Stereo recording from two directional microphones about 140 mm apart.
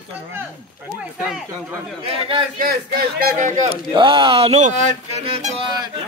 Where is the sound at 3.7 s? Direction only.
35° right (ahead or behind).